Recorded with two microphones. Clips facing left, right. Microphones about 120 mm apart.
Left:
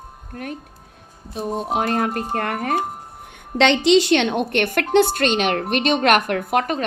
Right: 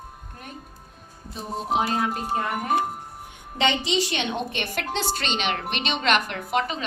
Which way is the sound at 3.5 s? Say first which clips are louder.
Left 9 dB; 75° left (ahead or behind).